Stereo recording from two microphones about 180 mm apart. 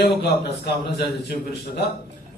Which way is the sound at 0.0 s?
65° left (ahead or behind).